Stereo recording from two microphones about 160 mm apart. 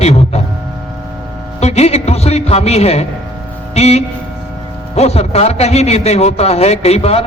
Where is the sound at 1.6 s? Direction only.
40° left (ahead or behind).